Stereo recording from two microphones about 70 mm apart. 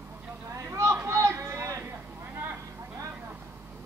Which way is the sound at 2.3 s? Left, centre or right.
Right.